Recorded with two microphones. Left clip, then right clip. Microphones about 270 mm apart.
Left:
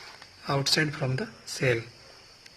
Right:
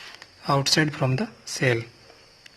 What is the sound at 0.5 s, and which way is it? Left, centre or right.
Speech, right.